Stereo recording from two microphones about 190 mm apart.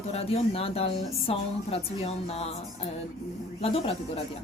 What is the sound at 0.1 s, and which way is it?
A woman's voice, 30° left (ahead or behind).